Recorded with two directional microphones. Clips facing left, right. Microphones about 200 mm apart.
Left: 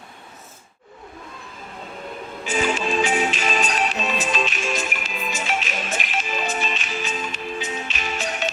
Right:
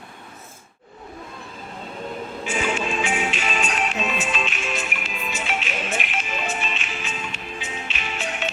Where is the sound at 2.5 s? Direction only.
35° left (ahead or behind).